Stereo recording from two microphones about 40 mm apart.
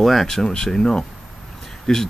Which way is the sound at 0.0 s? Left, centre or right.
Centre.